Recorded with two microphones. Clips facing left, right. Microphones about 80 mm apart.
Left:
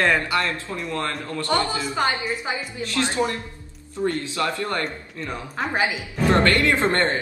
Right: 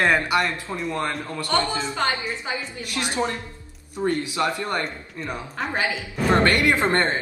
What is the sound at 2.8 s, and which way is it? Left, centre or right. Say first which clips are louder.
Speech: left 3 dB; centre.